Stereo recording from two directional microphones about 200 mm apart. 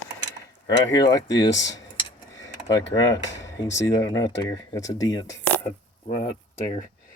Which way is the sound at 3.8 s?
15° left (ahead or behind).